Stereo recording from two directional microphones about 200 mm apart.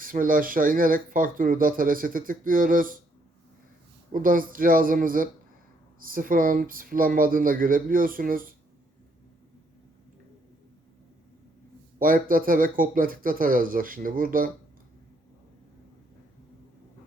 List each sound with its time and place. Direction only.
0.0 s speech: 45° right (ahead or behind)
4.1 s speech: 45° right (ahead or behind)
11.9 s speech: 45° right (ahead or behind)